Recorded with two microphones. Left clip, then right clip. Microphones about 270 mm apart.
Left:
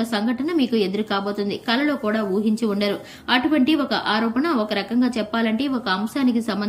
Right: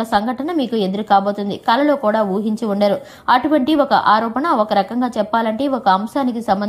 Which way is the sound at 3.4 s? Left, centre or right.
Centre.